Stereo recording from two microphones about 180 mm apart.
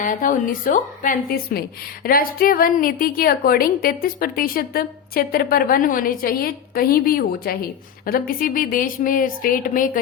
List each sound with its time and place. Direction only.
0.0 s a woman's voice: 50° left (ahead or behind)